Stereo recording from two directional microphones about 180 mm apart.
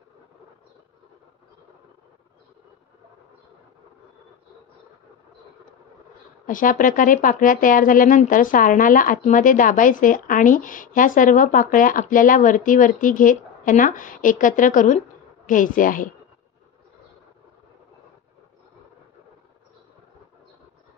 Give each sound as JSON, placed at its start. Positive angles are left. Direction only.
{"t": 6.4, "sound": "speech", "side_deg": 45}